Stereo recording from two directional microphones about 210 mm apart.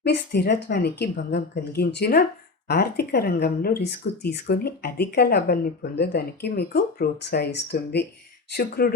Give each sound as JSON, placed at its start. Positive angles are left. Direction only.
{"t": 0.0, "sound": "speech", "side_deg": 50}